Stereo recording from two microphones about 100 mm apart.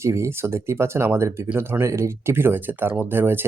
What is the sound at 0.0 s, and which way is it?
Speech, 30° right (ahead or behind).